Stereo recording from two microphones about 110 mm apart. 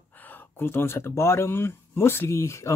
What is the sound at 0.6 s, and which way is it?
Speech, 20° left (ahead or behind).